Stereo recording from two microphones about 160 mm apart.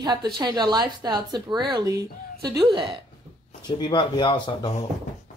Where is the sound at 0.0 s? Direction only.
25° right (ahead or behind).